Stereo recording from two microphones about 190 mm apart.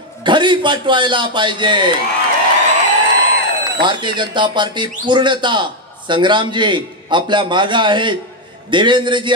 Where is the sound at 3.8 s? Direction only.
25° right (ahead or behind).